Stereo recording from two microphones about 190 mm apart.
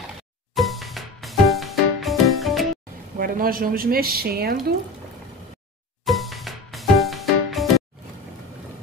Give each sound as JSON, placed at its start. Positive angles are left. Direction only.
{"t": 0.6, "sound": "music", "side_deg": 0}
{"t": 3.2, "sound": "speech", "side_deg": -50}
{"t": 6.0, "sound": "music", "side_deg": 0}